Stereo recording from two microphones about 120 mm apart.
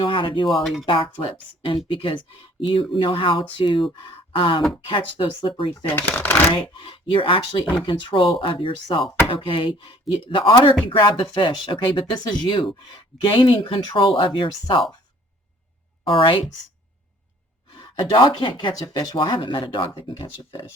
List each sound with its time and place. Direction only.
0.0 s speech: 45° left (ahead or behind)
0.4 s speech: centre (ahead or behind)
1.2 s speech: 45° left (ahead or behind)
4.3 s a sound: 45° left (ahead or behind)
4.9 s speech: 45° left (ahead or behind)
5.7 s speech: 15° left (ahead or behind)
6.5 s speech: 45° left (ahead or behind)
16.0 s speech: 45° left (ahead or behind)
18.1 s speech: 40° left (ahead or behind)